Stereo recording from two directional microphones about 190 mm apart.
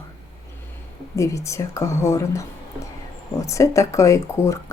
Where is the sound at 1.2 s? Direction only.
15° left (ahead or behind).